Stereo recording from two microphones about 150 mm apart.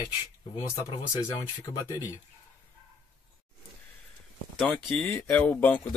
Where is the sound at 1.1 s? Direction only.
20° left (ahead or behind).